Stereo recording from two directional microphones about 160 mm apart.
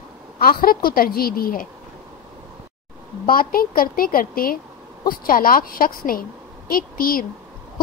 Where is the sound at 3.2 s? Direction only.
65° left (ahead or behind).